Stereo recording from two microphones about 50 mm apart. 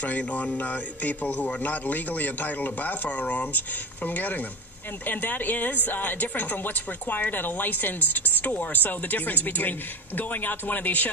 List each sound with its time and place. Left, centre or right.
0.2 s speech: left